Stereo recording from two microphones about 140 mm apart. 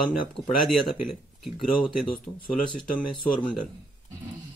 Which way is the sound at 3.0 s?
10° left (ahead or behind).